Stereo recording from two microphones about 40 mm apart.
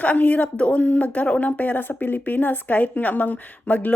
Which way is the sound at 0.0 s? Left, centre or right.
Left.